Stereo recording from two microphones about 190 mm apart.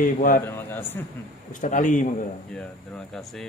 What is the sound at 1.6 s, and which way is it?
Speech, 40° left (ahead or behind).